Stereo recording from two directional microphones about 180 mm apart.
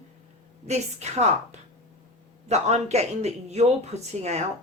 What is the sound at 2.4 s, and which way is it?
Speech, 40° right (ahead or behind).